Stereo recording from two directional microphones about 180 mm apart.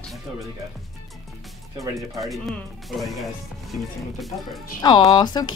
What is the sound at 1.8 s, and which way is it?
Speech, 20° right (ahead or behind).